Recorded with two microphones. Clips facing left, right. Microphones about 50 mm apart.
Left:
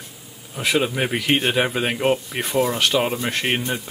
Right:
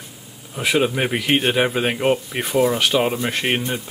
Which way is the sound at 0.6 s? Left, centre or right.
Centre.